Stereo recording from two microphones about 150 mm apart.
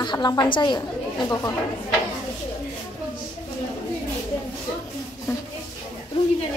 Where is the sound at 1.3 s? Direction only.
20° left (ahead or behind).